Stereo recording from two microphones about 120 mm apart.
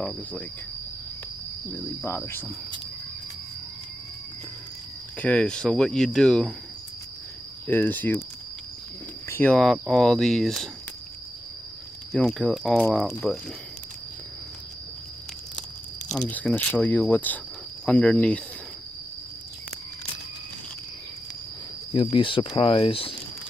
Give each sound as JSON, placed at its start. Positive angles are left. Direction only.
{"t": 0.0, "sound": "speech", "side_deg": 10}
{"t": 2.0, "sound": "cricket", "side_deg": 20}
{"t": 5.2, "sound": "speech", "side_deg": 10}
{"t": 7.6, "sound": "speech", "side_deg": 15}
{"t": 9.3, "sound": "speech", "side_deg": 15}
{"t": 9.6, "sound": "speech", "side_deg": 0}
{"t": 12.2, "sound": "speech", "side_deg": 10}
{"t": 16.3, "sound": "speech", "side_deg": 15}
{"t": 21.9, "sound": "speech", "side_deg": 45}